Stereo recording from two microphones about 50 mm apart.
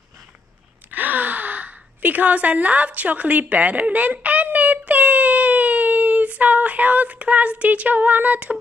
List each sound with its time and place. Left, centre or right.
0.8 s gasp: right